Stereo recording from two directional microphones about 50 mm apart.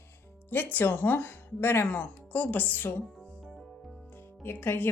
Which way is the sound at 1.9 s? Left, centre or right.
Left.